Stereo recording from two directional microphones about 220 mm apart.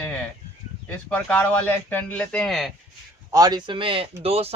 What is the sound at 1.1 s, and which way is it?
A man's voice, 5° left (ahead or behind).